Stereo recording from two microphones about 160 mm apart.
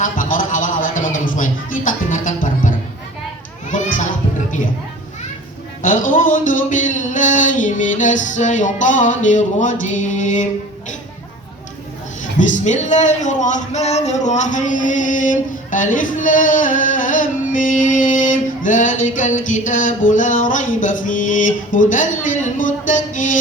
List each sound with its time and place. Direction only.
0.0 s a sound: 55° left (ahead or behind)
3.7 s children playing: 50° left (ahead or behind)
5.8 s speech: 55° left (ahead or behind)
12.4 s speech: 50° left (ahead or behind)